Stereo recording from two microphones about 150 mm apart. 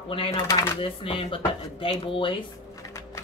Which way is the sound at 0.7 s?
35° left (ahead or behind).